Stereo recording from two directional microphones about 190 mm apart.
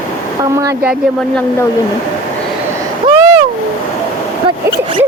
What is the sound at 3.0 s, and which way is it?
Vehicle, 20° right (ahead or behind).